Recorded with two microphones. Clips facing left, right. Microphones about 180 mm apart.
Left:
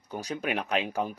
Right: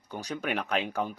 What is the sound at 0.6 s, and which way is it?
Speech, centre (ahead or behind).